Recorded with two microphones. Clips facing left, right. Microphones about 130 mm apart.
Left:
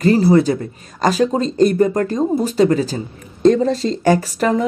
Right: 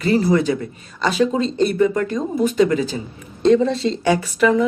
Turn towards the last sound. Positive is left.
turn(degrees=40)  # may be behind; listen again after turning